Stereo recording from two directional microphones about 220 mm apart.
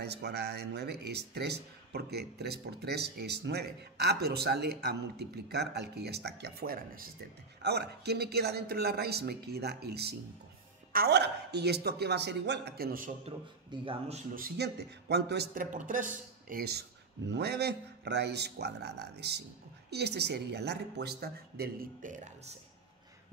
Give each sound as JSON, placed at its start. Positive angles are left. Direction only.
{"t": 0.0, "sound": "speech", "side_deg": -50}
{"t": 13.2, "sound": "a man's voice", "side_deg": -25}